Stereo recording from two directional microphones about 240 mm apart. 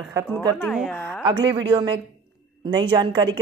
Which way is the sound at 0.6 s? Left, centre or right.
Centre.